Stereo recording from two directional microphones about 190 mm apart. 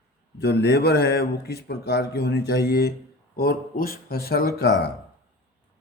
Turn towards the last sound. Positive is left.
turn(degrees=60)  # may be behind; listen again after turning